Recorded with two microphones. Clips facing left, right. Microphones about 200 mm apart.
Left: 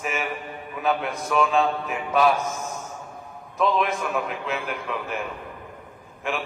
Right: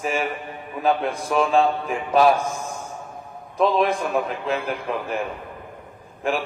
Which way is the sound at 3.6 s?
35° right (ahead or behind).